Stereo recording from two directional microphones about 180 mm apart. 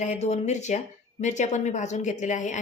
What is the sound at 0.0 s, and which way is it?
A woman's voice, 40° left (ahead or behind).